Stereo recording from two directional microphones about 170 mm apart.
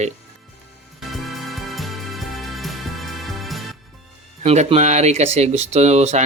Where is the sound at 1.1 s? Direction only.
Centre (ahead or behind).